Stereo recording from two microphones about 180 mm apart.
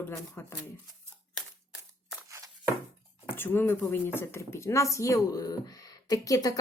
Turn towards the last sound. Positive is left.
turn(degrees=20)  # may be behind; listen again after turning